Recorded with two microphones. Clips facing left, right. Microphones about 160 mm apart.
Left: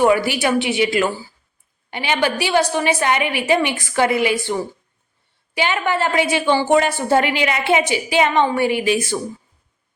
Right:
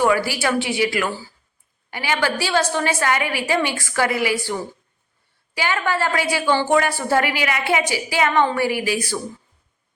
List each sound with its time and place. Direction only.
0.0 s a woman's voice: 20° left (ahead or behind)
5.5 s a woman's voice: 20° left (ahead or behind)